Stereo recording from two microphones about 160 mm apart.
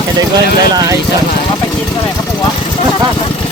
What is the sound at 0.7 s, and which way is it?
Speech, 25° right (ahead or behind).